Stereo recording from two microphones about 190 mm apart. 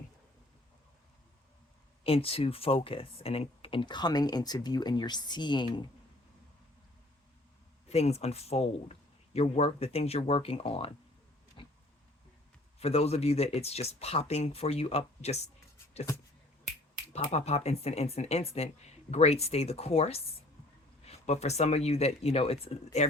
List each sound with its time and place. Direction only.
2.0 s speech: 30° left (ahead or behind)
7.9 s speech: 35° left (ahead or behind)
11.6 s a sound: 25° left (ahead or behind)
12.8 s speech: 35° left (ahead or behind)
17.1 s speech: 35° left (ahead or behind)